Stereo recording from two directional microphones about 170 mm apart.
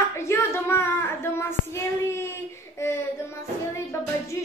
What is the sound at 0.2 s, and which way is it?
Child singing, 15° left (ahead or behind).